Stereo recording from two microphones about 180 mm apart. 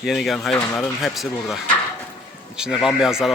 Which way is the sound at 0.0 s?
Centre (ahead or behind).